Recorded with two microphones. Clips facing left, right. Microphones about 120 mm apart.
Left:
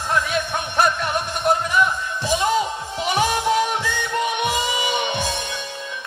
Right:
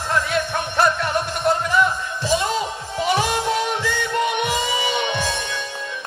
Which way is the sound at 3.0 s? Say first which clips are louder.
Right 1 dB; 15° left (ahead or behind).